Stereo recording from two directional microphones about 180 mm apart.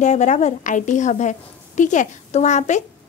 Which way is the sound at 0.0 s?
40° left (ahead or behind).